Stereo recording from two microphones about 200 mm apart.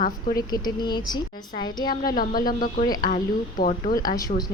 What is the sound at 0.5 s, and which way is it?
Speech, 20° left (ahead or behind).